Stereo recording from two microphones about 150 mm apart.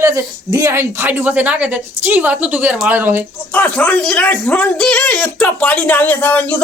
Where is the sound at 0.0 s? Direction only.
20° right (ahead or behind).